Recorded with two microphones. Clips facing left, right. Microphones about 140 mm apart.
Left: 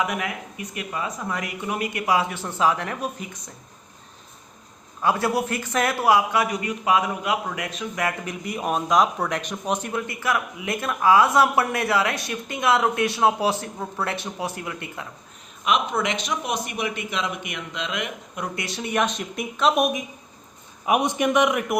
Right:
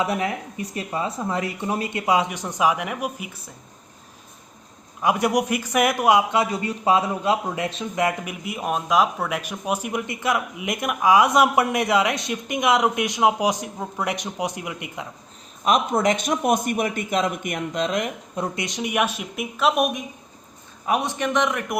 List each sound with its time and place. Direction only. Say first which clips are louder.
0.0 s speech: right 3 dB; 30° right (ahead or behind); by 3.5 s 10° right (ahead or behind)
5.0 s speech: right 2 dB; 15° right (ahead or behind)
8.2 s speech: left 1 dB; 5° right (ahead or behind)
15.6 s a man's voice: right 4 dB; 45° right (ahead or behind)
18.5 s speech: left 1 dB; 20° right (ahead or behind); by 20.1 s centre (ahead or behind)
20.8 s a man's voice: left 2 dB; 15° left (ahead or behind)